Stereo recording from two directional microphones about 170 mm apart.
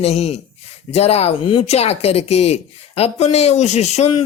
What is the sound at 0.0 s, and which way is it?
Speech, 40° left (ahead or behind).